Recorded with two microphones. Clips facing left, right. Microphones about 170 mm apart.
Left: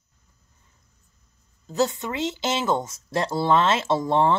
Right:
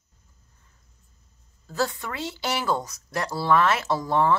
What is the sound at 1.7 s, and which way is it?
Speech, 20° left (ahead or behind).